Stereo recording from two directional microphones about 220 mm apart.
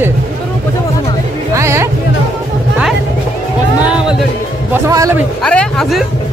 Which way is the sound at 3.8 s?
5° right (ahead or behind).